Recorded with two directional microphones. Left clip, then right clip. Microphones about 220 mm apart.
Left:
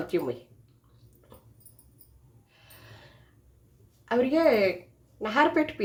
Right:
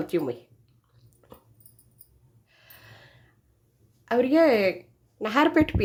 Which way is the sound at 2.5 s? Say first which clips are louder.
Right 1 dB; 25° right (ahead or behind).